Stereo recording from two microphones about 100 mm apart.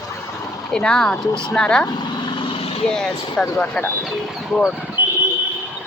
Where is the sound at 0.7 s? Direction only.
5° left (ahead or behind).